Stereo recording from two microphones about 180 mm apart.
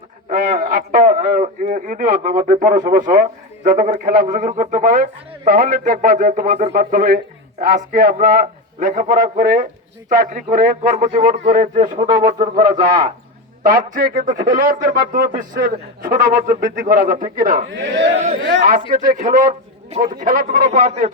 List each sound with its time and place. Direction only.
0.3 s a man's voice: 50° right (ahead or behind); by 12.2 s 25° right (ahead or behind)
12.2 s a man's voice: 45° right (ahead or behind)
17.7 s speech: 90° right
18.9 s a man's voice: 45° right (ahead or behind)